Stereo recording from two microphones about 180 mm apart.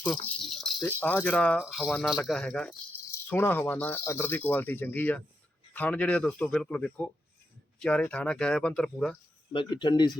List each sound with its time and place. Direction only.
0.0 s rattle: centre (ahead or behind)
0.9 s speech: 10° left (ahead or behind)
9.5 s speech: 25° left (ahead or behind)